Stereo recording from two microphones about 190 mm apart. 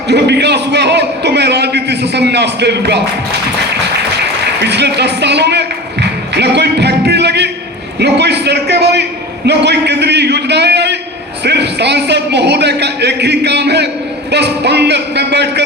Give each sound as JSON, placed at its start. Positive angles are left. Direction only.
{"t": 0.1, "sound": "a man's voice", "side_deg": -60}
{"t": 4.4, "sound": "a sound", "side_deg": -60}
{"t": 7.9, "sound": "a man's voice", "side_deg": -60}